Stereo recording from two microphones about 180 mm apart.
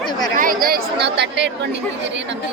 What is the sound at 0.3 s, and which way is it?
Speech, 50° right (ahead or behind).